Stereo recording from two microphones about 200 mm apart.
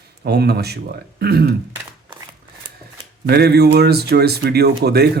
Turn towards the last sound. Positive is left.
turn(degrees=-55)  # may be behind; listen again after turning